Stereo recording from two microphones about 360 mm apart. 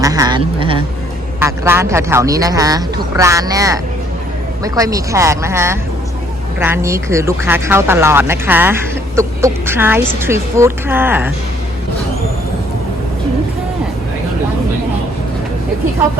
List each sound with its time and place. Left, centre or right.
0.0 s speech: centre